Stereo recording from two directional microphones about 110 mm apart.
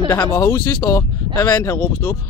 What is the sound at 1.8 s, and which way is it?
Speech, 20° left (ahead or behind).